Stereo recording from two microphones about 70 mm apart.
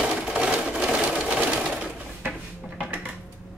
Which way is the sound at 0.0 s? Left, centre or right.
Centre.